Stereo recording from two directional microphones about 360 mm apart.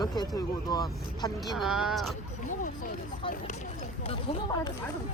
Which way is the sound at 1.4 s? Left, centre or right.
Centre.